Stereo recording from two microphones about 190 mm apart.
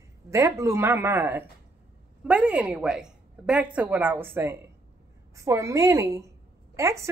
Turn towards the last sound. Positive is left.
turn(degrees=-15)  # may be behind; listen again after turning